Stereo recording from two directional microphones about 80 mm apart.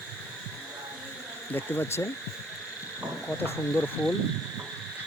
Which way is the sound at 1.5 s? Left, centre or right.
Left.